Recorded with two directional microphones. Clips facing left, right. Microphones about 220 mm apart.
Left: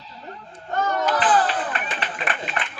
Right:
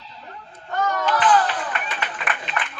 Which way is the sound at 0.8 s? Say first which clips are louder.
Even; 25° left (ahead or behind).